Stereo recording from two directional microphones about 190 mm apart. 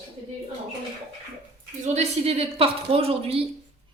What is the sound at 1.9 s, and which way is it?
A woman's voice, 35° right (ahead or behind).